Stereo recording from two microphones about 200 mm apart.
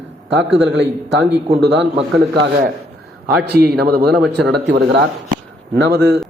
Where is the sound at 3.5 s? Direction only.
55° right (ahead or behind).